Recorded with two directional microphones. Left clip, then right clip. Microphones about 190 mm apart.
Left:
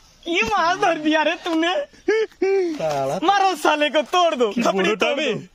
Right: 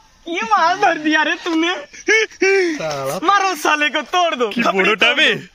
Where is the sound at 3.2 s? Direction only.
25° left (ahead or behind).